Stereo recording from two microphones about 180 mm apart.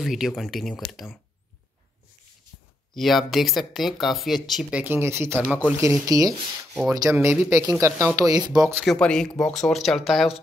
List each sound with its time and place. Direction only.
0.0 s speech: centre (ahead or behind)
2.9 s speech: centre (ahead or behind); by 8.8 s 15° right (ahead or behind)
8.8 s speech: 5° left (ahead or behind)